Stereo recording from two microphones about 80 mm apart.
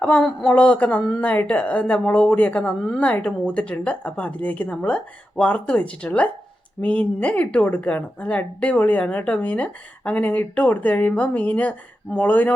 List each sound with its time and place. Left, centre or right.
0.0 s a woman's voice: centre